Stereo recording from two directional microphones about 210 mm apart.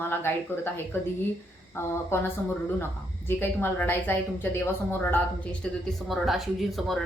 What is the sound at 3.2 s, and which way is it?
Speech, 10° left (ahead or behind).